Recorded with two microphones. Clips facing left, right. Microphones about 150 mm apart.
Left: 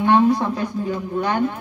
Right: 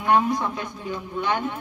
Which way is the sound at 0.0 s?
30° left (ahead or behind).